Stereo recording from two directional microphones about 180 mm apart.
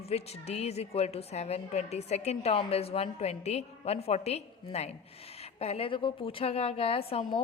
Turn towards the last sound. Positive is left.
turn(degrees=30)  # may be behind; listen again after turning